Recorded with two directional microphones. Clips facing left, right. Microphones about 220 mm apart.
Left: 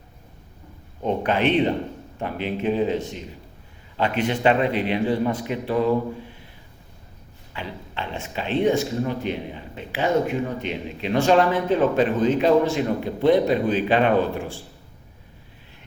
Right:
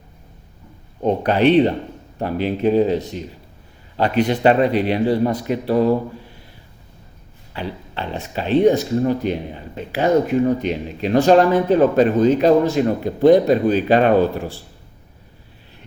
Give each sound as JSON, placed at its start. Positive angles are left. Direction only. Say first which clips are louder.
{"t": 1.0, "sound": "speech", "louder": "right 6 dB", "side_deg": -35}
{"t": 7.5, "sound": "speech", "louder": "right 5 dB", "side_deg": -35}